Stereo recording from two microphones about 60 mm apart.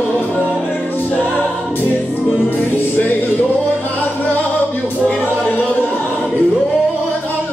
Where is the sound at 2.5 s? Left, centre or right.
Left.